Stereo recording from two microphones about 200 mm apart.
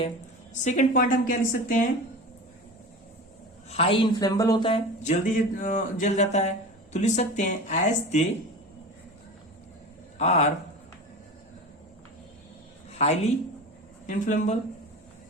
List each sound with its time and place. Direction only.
0.6 s speech: 40° left (ahead or behind)
3.7 s speech: 30° left (ahead or behind)
5.0 s speech: 40° left (ahead or behind)
10.2 s speech: 35° left (ahead or behind)
12.9 s a woman's voice: 35° left (ahead or behind)